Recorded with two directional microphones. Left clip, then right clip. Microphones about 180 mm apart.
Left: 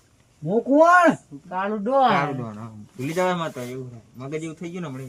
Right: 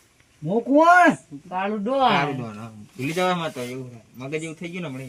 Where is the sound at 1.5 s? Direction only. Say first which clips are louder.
Left 1 dB; 10° right (ahead or behind).